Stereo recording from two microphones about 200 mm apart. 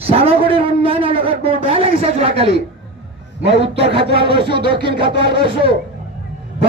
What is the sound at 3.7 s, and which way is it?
Speech, 55° right (ahead or behind).